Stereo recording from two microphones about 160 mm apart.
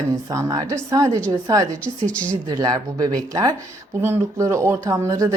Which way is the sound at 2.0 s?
10° left (ahead or behind).